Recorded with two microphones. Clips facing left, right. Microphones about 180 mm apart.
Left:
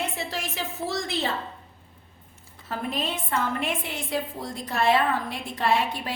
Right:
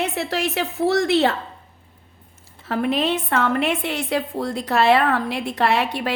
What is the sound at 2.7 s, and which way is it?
A woman's voice, 70° right (ahead or behind).